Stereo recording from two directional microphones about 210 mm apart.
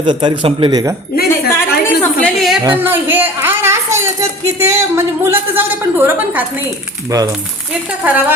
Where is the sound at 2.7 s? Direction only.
10° right (ahead or behind).